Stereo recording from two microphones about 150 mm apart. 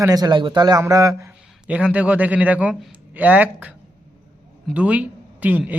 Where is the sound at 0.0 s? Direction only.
25° right (ahead or behind).